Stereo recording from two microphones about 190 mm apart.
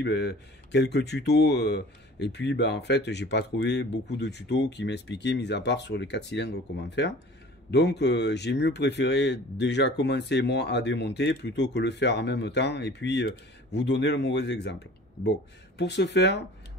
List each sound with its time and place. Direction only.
0.0 s speech: 65° left (ahead or behind)
15.8 s speech: 65° left (ahead or behind)